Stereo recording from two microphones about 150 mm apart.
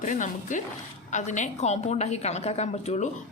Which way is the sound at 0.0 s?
55° left (ahead or behind).